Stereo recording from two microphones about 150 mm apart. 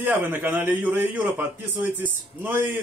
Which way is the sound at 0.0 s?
15° right (ahead or behind).